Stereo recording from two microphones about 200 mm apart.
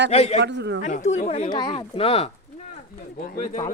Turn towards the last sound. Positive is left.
turn(degrees=45)  # may be behind; listen again after turning